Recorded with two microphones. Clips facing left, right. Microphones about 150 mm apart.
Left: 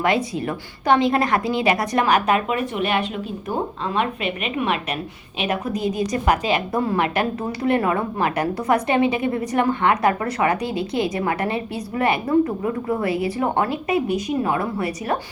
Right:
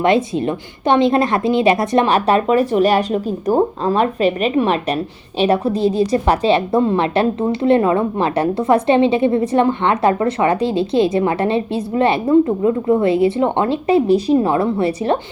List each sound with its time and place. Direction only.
0.0 s a woman's voice: 25° right (ahead or behind)